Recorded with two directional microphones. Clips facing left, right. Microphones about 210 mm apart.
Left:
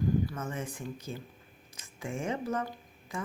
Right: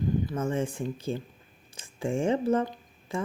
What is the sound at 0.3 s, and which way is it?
Speech, 30° right (ahead or behind).